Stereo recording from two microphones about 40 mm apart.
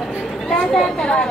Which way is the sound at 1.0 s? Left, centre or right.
Left.